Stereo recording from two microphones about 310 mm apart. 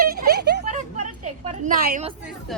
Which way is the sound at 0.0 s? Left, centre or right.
Right.